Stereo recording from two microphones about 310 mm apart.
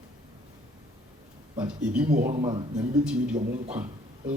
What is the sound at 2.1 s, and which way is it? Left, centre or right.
Speech, right.